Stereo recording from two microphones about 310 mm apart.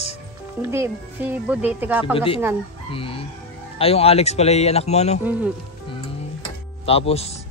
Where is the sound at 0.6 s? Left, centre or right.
Centre.